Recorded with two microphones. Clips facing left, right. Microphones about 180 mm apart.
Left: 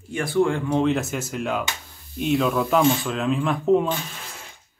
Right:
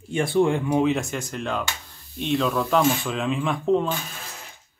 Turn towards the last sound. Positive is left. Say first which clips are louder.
# left 2 dB
turn(degrees=5)  # may be behind; listen again after turning